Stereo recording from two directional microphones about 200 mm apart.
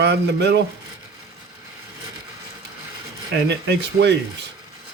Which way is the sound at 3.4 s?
60° right (ahead or behind).